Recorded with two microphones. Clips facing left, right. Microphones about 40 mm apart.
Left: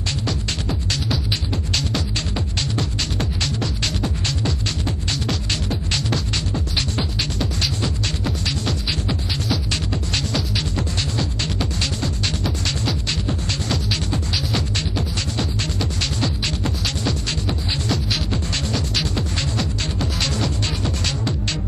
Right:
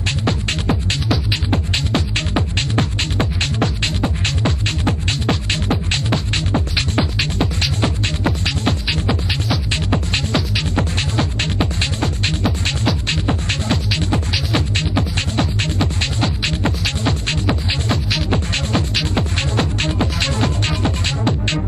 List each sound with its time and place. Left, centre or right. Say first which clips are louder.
0.2 s music: right 5 dB; right
13.1 s music: right 4 dB; right